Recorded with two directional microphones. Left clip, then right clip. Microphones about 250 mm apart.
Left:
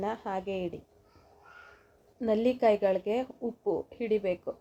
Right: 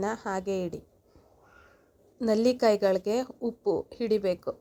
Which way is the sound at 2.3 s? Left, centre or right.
Right.